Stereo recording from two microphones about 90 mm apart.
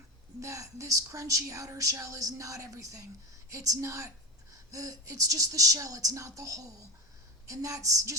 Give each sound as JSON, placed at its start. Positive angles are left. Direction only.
{"t": 0.3, "sound": "speech", "side_deg": -35}